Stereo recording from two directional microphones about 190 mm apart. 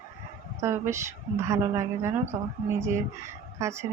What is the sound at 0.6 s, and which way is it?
A woman's voice, 15° right (ahead or behind).